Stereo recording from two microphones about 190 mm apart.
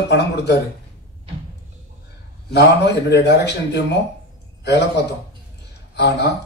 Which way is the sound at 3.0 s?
65° left (ahead or behind).